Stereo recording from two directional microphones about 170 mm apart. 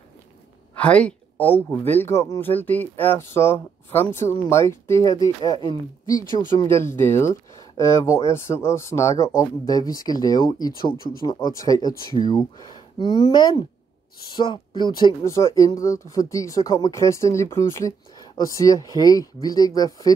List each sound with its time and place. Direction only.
0.7 s speech: 5° left (ahead or behind); by 20.1 s 20° left (ahead or behind)